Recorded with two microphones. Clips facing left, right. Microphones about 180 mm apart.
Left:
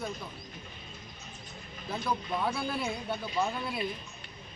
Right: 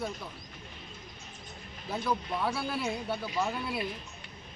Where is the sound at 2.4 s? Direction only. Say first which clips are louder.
Right 1 dB; 5° right (ahead or behind).